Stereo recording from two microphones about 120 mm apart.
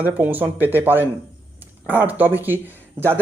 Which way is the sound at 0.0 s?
15° right (ahead or behind).